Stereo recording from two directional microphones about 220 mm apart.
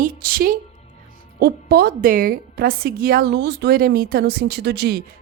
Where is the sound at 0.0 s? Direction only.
45° right (ahead or behind).